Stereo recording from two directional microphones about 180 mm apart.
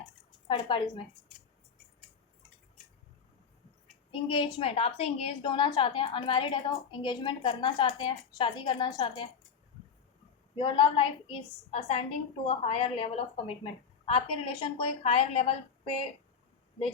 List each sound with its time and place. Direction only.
0.4 s a woman's voice: 25° left (ahead or behind)
4.1 s a woman's voice: 30° left (ahead or behind)
10.5 s a woman's voice: 25° left (ahead or behind)